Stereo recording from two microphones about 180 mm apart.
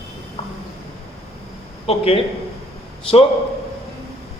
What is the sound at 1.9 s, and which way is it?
A man's voice, 35° left (ahead or behind).